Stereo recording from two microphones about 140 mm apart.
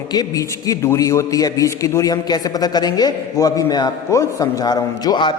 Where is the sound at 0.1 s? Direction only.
25° left (ahead or behind).